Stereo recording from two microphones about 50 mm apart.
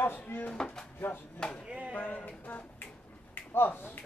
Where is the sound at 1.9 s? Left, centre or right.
Left.